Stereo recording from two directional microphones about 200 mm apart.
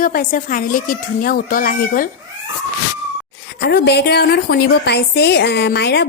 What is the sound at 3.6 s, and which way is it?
A woman's voice, 55° left (ahead or behind).